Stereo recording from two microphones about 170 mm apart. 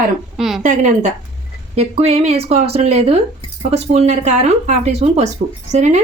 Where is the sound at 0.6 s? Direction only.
45° right (ahead or behind).